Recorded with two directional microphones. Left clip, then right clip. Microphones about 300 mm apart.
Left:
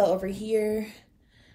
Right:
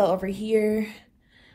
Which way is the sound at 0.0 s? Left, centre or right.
Right.